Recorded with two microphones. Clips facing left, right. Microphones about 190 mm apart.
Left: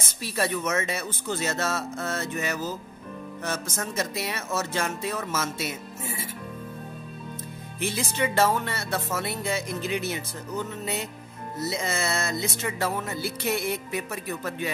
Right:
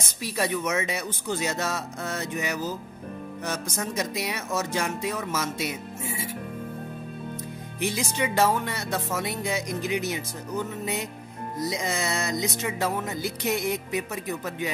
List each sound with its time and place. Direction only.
0.2 s speech: 15° right (ahead or behind)
7.8 s speech: 15° right (ahead or behind)